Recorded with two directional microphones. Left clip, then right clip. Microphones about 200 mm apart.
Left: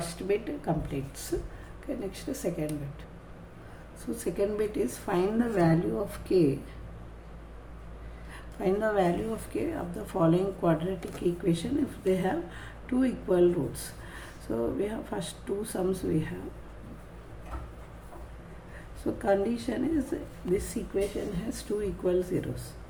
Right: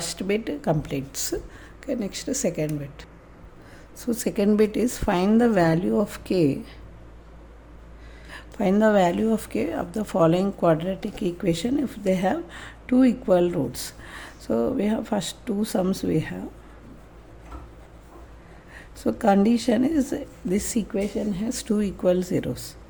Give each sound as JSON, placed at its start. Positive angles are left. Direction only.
{"t": 0.0, "sound": "speech", "side_deg": -55}
{"t": 8.3, "sound": "speech", "side_deg": -50}
{"t": 19.0, "sound": "a woman's voice", "side_deg": -50}